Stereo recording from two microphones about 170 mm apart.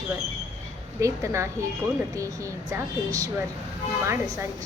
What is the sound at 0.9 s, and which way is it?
A woman's voice, 15° right (ahead or behind).